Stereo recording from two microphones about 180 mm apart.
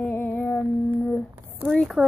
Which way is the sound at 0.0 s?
10° left (ahead or behind).